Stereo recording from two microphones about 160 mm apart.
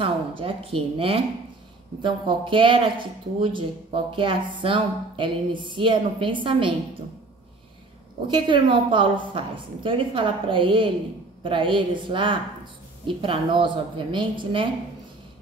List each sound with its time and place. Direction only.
0.4 s speech: 35° right (ahead or behind)
8.3 s speech: 30° right (ahead or behind)